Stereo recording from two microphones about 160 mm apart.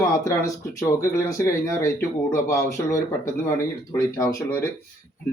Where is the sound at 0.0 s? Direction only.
20° left (ahead or behind).